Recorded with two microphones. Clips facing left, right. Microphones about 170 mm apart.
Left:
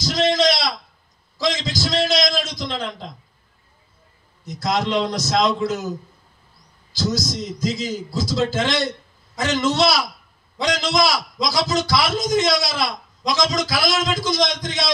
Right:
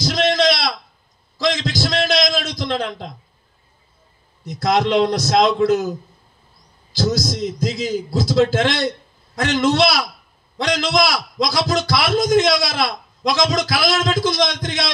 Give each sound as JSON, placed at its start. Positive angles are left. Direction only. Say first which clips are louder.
{"t": 0.0, "sound": "a sound", "louder": "right 1 dB", "side_deg": -60}
{"t": 4.6, "sound": "a man's voice", "louder": "right 5 dB", "side_deg": -60}
{"t": 7.0, "sound": "a man's voice", "louder": "right 3 dB", "side_deg": -60}